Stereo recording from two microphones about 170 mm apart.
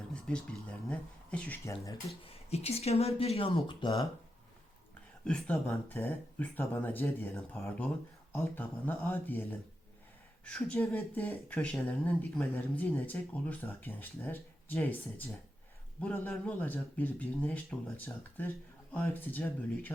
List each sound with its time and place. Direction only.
0.1 s speech: 5° left (ahead or behind)
2.2 s speech: 35° left (ahead or behind)
5.2 s speech: 5° left (ahead or behind)